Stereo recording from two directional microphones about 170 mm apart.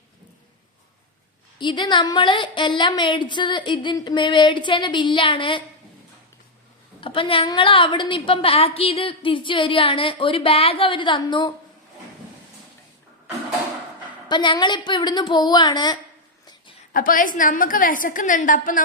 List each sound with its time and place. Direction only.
1.5 s a woman's voice: 25° left (ahead or behind)
7.0 s a woman's voice: 30° left (ahead or behind)
14.3 s a woman's voice: 25° left (ahead or behind)
16.9 s a woman's voice: 55° left (ahead or behind)